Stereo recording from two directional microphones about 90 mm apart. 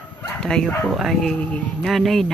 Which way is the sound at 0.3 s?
5° left (ahead or behind).